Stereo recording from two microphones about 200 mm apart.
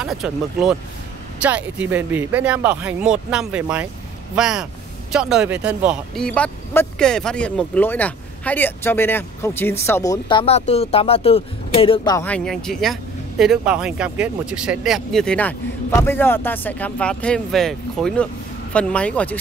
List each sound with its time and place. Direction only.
0.0 s speech: centre (ahead or behind); by 12.3 s 20° left (ahead or behind)
12.3 s speech: centre (ahead or behind)